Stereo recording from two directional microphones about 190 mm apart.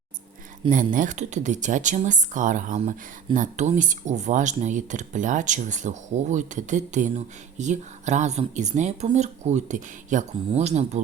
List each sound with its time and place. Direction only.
0.9 s speech: 40° right (ahead or behind)